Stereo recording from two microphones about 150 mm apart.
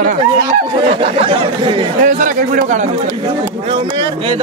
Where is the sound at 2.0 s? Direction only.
60° right (ahead or behind).